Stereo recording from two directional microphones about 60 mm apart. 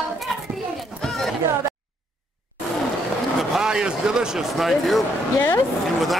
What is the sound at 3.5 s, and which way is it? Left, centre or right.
Speech, centre.